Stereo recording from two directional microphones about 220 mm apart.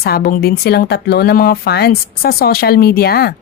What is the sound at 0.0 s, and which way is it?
A woman's voice, 45° left (ahead or behind).